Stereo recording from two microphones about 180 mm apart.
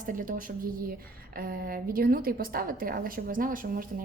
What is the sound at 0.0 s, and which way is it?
A woman's voice, 50° right (ahead or behind).